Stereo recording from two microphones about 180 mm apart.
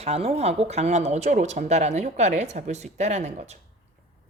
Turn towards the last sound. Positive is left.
turn(degrees=-40)  # may be behind; listen again after turning